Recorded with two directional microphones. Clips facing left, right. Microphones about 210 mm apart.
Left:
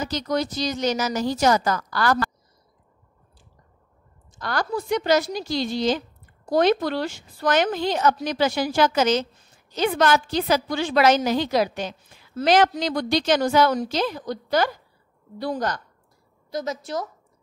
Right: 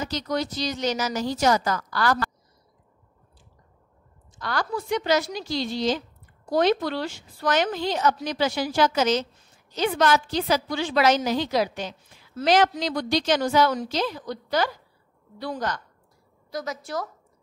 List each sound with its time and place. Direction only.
0.0 s speech: 45° left (ahead or behind)
4.4 s a woman's voice: 45° left (ahead or behind)
16.5 s a woman's voice: 20° left (ahead or behind)